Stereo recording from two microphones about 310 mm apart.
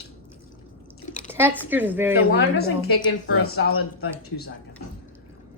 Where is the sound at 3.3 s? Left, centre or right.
Left.